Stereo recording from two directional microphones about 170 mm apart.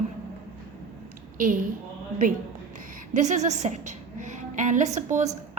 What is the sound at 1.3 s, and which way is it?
Speech, 50° right (ahead or behind).